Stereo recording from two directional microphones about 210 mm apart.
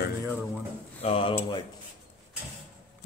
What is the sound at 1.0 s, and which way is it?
Speech, 25° left (ahead or behind).